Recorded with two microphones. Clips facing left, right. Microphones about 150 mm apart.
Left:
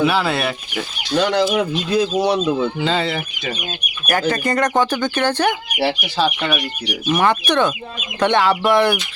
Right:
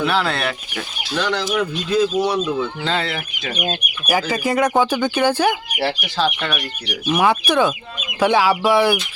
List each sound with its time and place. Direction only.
0.0 s speech: 5° left (ahead or behind)
1.2 s speech: 15° left (ahead or behind)
2.1 s speech: 25° left (ahead or behind)
2.8 s speech: centre (ahead or behind)
5.8 s speech: 5° left (ahead or behind)